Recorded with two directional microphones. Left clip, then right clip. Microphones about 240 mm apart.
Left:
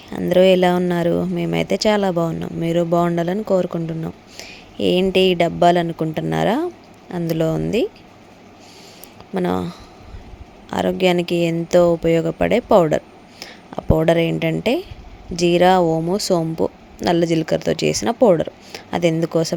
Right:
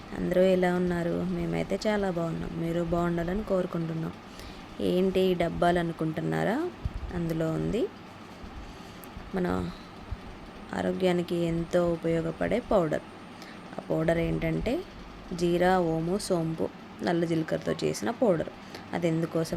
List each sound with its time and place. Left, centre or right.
0.1 s speech: left
9.3 s speech: left